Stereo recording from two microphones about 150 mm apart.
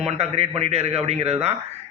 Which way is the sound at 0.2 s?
45° right (ahead or behind).